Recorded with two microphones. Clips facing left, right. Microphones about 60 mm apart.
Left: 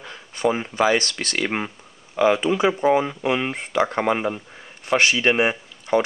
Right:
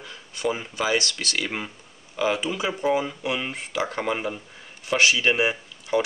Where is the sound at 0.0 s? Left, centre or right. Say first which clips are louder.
Left 5 dB; left.